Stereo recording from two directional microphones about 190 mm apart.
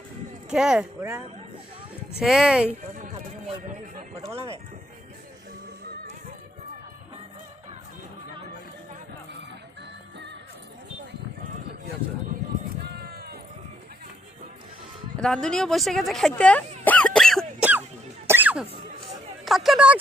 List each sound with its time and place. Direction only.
0.5 s speech: 5° right (ahead or behind)
2.9 s music: 40° right (ahead or behind)
12.8 s run: 55° right (ahead or behind)
15.2 s speech: 5° left (ahead or behind)
16.8 s a sound: 10° left (ahead or behind)
18.3 s a sound: 10° right (ahead or behind)
19.5 s speech: centre (ahead or behind)